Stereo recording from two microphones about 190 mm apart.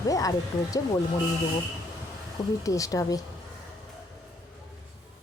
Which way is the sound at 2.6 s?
15° left (ahead or behind).